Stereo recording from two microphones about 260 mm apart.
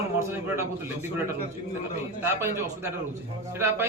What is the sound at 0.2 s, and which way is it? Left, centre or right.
Speech, centre.